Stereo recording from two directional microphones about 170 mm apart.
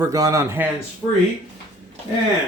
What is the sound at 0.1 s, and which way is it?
Speech, 20° right (ahead or behind).